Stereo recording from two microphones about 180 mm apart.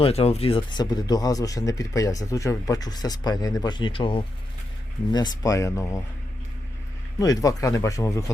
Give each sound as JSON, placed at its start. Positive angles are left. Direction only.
{"t": 0.0, "sound": "speech", "side_deg": 35}
{"t": 7.2, "sound": "speech", "side_deg": 20}